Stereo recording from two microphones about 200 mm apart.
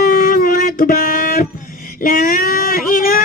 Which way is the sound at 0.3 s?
45° left (ahead or behind).